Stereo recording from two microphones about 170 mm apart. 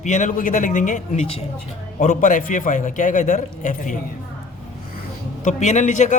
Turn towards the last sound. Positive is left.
turn(degrees=45)  # may be behind; listen again after turning